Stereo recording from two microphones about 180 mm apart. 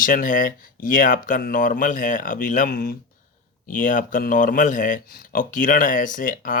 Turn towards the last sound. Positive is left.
turn(degrees=50)  # may be behind; listen again after turning